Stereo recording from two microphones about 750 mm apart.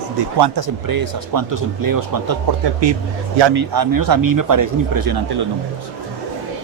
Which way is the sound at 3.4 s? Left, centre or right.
Right.